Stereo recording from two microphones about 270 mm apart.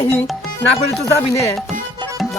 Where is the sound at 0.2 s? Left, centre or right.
Centre.